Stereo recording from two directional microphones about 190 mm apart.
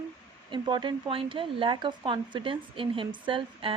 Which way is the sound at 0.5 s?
25° right (ahead or behind).